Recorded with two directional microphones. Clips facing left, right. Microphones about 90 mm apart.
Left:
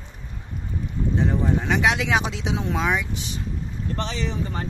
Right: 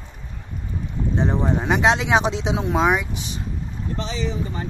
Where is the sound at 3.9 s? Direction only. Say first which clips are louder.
Right 1 dB; 65° left (ahead or behind).